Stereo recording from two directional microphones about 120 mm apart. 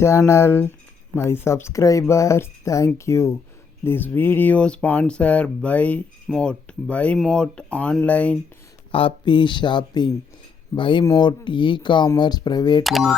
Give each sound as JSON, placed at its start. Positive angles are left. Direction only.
{"t": 0.0, "sound": "speech", "side_deg": 25}
{"t": 8.9, "sound": "speech", "side_deg": 50}
{"t": 12.8, "sound": "speech", "side_deg": 0}